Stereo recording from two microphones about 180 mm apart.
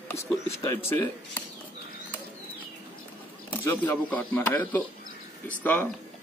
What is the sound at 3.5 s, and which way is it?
Speech, 10° left (ahead or behind).